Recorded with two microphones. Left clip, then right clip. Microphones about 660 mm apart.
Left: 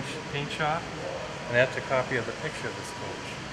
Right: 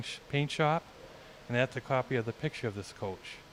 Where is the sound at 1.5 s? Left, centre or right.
Right.